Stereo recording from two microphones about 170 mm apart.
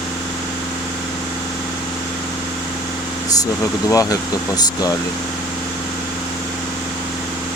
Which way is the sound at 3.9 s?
20° left (ahead or behind).